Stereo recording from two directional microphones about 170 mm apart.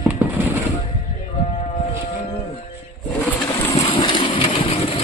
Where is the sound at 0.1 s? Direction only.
10° right (ahead or behind).